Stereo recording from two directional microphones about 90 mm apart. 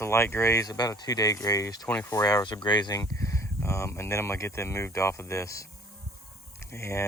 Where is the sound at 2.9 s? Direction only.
35° left (ahead or behind).